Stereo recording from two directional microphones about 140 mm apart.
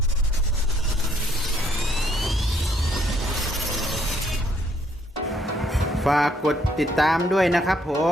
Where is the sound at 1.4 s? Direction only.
Centre (ahead or behind).